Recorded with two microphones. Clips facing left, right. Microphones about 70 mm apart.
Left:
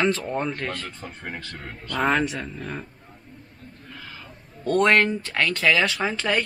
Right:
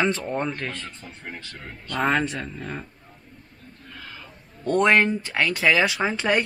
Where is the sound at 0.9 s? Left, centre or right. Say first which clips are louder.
Left 3 dB; left.